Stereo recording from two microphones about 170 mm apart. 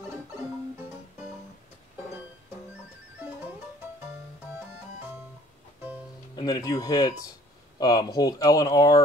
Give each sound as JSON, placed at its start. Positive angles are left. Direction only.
{"t": 6.3, "sound": "speech", "side_deg": 20}